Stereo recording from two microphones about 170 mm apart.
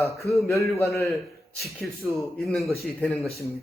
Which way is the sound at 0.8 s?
15° left (ahead or behind).